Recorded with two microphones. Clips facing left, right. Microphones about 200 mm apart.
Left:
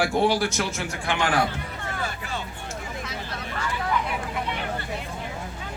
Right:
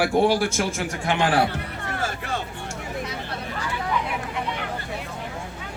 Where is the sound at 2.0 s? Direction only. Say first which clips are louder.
Right 4 dB; 55° right (ahead or behind).